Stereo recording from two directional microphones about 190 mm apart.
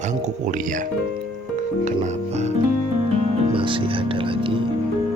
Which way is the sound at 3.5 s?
25° right (ahead or behind).